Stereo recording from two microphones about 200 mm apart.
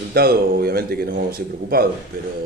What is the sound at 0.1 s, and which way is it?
A man's voice, 50° right (ahead or behind).